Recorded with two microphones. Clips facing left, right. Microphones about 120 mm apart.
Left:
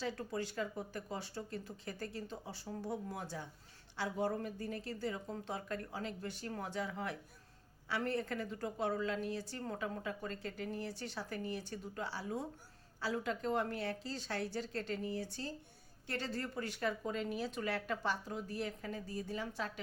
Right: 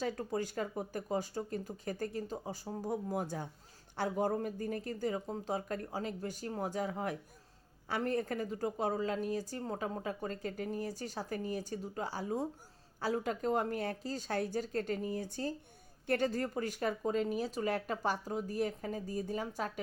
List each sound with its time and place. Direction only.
0.0 s speech: 40° right (ahead or behind)
9.6 s speech: 30° right (ahead or behind)